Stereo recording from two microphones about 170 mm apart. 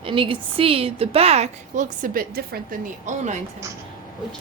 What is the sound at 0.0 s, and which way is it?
A woman's voice, 30° right (ahead or behind).